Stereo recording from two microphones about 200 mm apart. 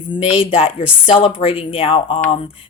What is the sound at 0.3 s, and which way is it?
Speech, 25° left (ahead or behind).